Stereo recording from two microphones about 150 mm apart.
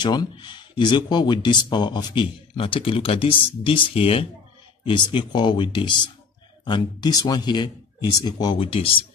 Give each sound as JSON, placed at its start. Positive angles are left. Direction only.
{"t": 0.0, "sound": "speech", "side_deg": 30}